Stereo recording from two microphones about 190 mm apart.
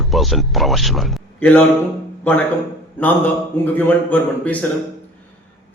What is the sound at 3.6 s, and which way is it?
A man's voice, 10° left (ahead or behind).